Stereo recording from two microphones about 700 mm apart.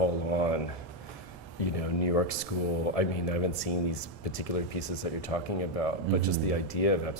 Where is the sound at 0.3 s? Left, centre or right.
Left.